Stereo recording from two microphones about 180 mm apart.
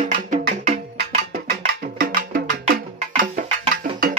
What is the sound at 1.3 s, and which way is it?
Wood block, 55° right (ahead or behind).